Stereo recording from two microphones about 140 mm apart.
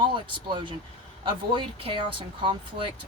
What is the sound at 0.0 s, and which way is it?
Speech, 35° right (ahead or behind).